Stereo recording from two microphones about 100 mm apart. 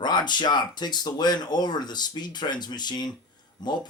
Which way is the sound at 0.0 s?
50° left (ahead or behind).